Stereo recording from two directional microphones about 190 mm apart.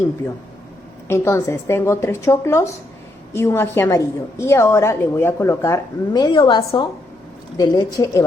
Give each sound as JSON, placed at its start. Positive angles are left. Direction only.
{"t": 1.0, "sound": "a woman's voice", "side_deg": 15}